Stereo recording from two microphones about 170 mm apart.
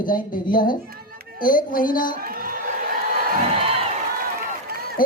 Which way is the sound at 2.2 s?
60° right (ahead or behind).